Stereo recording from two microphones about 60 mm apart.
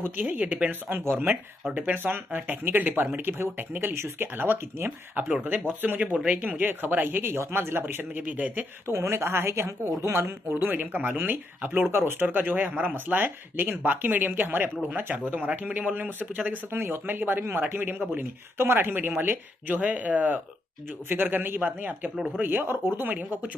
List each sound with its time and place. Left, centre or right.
0.0 s speech: right
8.8 s speech: right
10.1 s speech: right
16.7 s speech: right